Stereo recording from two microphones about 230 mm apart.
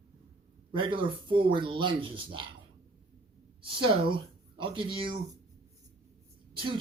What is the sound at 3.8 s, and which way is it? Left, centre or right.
Speech, right.